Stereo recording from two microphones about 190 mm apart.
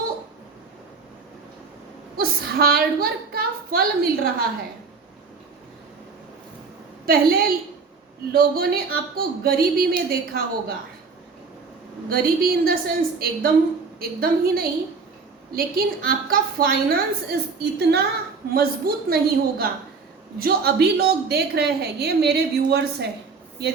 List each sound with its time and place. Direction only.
2.1 s speech: 55° right (ahead or behind)
7.0 s speech: 50° right (ahead or behind)
12.0 s a woman's voice: 50° right (ahead or behind)